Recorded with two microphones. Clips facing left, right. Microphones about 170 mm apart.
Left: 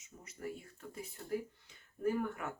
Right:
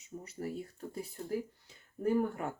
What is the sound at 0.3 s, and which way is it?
Speech, 35° right (ahead or behind).